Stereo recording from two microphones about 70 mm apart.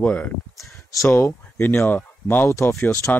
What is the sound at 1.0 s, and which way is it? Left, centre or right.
Speech, left.